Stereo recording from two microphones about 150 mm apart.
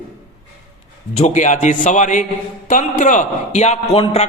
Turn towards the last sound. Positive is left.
turn(degrees=45)  # may be behind; listen again after turning